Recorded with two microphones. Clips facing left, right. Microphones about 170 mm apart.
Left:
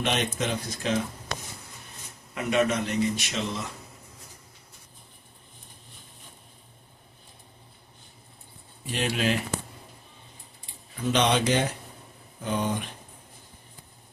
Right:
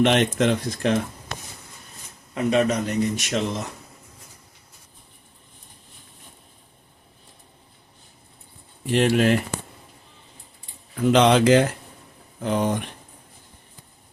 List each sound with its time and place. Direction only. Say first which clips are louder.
0.0 s speech: right 9 dB; 85° right
2.3 s a man's voice: right 4 dB; 30° right (ahead or behind); by 3.7 s 50° right (ahead or behind)
8.9 s speech: right 8 dB; 55° right (ahead or behind)
11.0 s speech: right 7 dB; 90° right
12.4 s speech: right 5 dB; 75° right (ahead or behind)